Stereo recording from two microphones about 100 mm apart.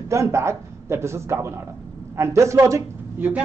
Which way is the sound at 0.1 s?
30° right (ahead or behind).